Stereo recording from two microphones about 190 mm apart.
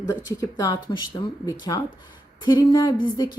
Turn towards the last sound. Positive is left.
turn(degrees=20)  # may be behind; listen again after turning